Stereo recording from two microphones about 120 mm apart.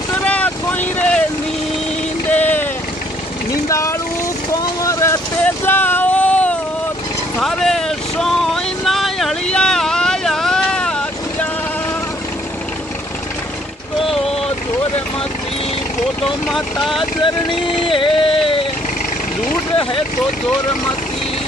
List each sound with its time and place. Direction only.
0.2 s vehicle: 10° left (ahead or behind)
2.3 s vehicle: 15° left (ahead or behind)
3.6 s vehicle: 25° left (ahead or behind)
5.4 s a sound: 15° left (ahead or behind)
7.3 s vehicle: 5° left (ahead or behind)
17.2 s a sound: 45° left (ahead or behind)